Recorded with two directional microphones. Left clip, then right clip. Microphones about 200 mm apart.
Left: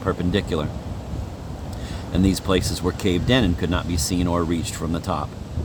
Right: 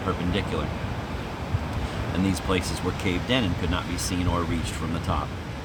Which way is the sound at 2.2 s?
60° left (ahead or behind).